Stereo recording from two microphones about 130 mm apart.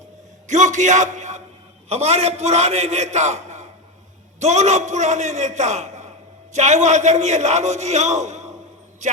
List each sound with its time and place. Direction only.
0.4 s a man's voice: 70° right (ahead or behind)
1.9 s a man's voice: 55° right (ahead or behind)